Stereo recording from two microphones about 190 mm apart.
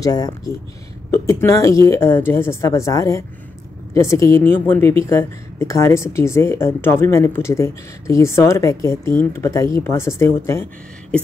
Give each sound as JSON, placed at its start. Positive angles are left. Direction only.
{"t": 0.0, "sound": "a woman's voice", "side_deg": 20}